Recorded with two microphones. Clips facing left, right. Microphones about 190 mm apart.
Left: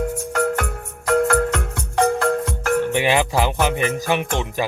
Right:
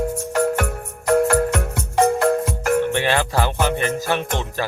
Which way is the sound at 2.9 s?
15° left (ahead or behind).